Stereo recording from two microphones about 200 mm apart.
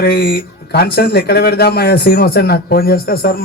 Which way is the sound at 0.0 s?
50° left (ahead or behind).